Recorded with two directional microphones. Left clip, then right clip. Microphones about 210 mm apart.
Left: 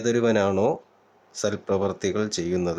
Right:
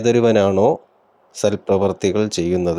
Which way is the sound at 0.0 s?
20° right (ahead or behind).